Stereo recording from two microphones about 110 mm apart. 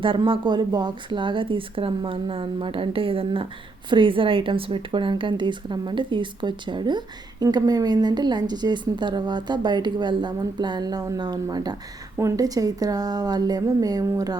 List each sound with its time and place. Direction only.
0.0 s a woman's voice: 50° right (ahead or behind); by 14.3 s 30° right (ahead or behind)